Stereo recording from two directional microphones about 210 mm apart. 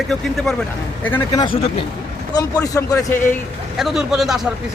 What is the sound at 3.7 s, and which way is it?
Speech, centre (ahead or behind).